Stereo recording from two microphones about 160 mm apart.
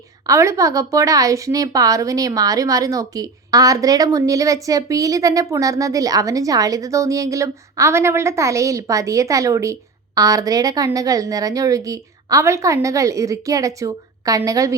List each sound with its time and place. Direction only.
0.3 s a woman's voice: 20° right (ahead or behind)